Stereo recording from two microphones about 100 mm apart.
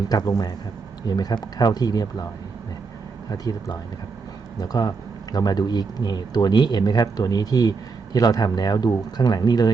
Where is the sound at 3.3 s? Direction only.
35° left (ahead or behind).